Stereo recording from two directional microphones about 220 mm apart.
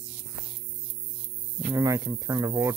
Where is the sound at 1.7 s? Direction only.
15° right (ahead or behind).